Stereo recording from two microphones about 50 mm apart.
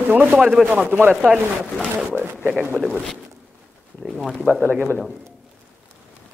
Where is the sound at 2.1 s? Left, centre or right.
Right.